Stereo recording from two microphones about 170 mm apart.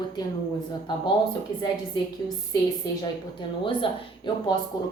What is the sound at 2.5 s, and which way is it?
A woman's voice, 25° left (ahead or behind).